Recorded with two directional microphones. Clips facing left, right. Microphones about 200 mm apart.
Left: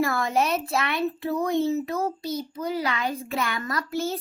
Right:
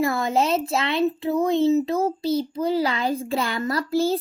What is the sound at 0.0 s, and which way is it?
A child's voice, 25° right (ahead or behind).